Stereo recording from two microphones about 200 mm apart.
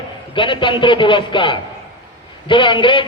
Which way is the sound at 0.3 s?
25° left (ahead or behind).